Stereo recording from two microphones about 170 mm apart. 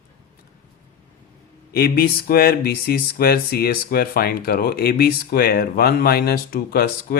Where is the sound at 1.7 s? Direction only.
60° left (ahead or behind).